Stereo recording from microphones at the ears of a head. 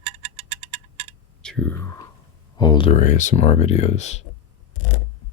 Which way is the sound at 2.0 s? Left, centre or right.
Left.